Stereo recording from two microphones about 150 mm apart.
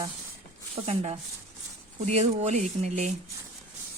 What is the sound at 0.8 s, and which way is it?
Speech, 45° right (ahead or behind).